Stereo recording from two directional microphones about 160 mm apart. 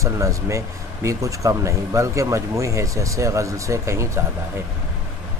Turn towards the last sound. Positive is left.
turn(degrees=-20)  # may be behind; listen again after turning